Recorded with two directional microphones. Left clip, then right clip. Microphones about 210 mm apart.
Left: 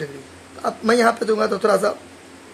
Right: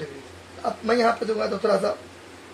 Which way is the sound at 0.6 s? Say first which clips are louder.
Left 4 dB; 40° left (ahead or behind).